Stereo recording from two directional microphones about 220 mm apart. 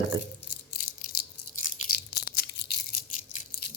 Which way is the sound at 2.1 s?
45° left (ahead or behind).